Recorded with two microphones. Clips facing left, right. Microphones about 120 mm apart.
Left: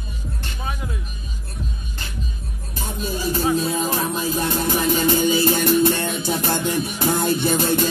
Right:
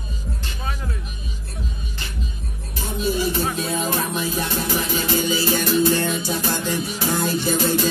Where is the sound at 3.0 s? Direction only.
45° left (ahead or behind).